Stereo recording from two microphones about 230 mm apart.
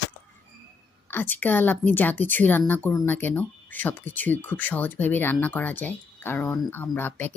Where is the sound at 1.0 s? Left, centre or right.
Centre.